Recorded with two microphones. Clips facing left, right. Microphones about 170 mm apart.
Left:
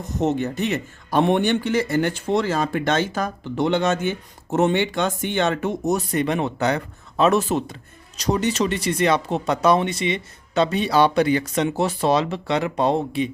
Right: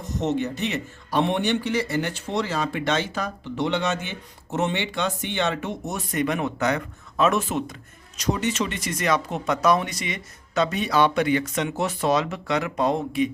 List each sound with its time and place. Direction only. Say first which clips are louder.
0.2 s speech: left 3 dB; 50° left (ahead or behind); by 13.3 s 30° left (ahead or behind)